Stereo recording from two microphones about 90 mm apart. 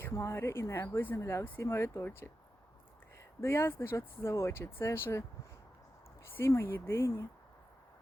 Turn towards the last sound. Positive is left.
turn(degrees=30)  # may be behind; listen again after turning